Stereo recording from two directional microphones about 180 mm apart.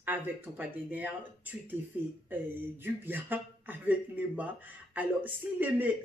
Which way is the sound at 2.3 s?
10° right (ahead or behind).